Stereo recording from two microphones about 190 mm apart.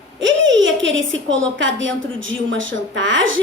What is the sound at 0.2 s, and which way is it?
A woman's voice, 75° right (ahead or behind).